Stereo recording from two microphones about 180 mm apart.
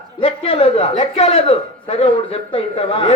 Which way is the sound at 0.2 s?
30° left (ahead or behind).